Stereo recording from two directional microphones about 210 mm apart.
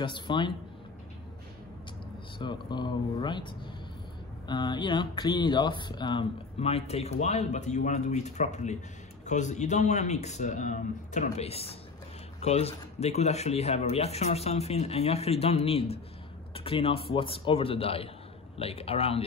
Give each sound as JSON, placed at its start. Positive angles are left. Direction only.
{"t": 0.0, "sound": "speech", "side_deg": 20}
{"t": 2.3, "sound": "speech", "side_deg": 20}